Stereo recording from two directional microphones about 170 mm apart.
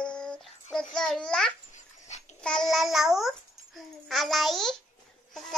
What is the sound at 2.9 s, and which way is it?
A child's voice, centre (ahead or behind).